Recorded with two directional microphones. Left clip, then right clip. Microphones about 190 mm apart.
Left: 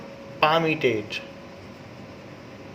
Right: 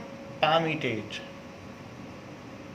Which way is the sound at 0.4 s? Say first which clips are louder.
Left 5 dB; 50° left (ahead or behind).